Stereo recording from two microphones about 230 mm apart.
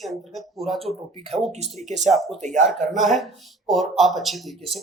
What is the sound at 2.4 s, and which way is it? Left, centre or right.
Speech, right.